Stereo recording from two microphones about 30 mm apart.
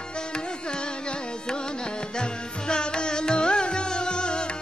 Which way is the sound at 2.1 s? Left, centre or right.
Left.